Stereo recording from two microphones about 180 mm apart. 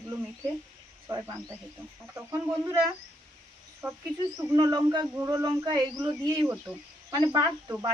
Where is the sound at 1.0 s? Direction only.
15° right (ahead or behind).